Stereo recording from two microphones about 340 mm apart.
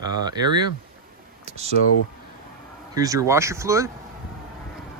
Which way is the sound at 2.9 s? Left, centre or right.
Centre.